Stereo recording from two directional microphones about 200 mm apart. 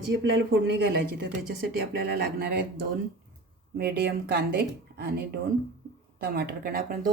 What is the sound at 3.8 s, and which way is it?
Speech, 55° right (ahead or behind).